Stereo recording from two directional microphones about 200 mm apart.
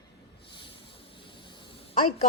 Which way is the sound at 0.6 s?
25° left (ahead or behind).